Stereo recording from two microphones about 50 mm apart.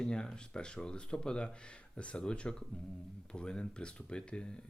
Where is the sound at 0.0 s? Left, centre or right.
Centre.